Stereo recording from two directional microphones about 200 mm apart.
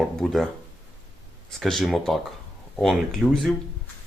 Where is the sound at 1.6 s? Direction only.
Centre (ahead or behind).